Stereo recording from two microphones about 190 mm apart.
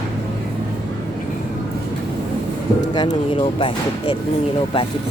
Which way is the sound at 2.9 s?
20° left (ahead or behind).